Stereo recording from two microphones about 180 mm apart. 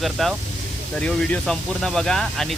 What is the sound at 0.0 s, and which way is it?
Speech, centre (ahead or behind).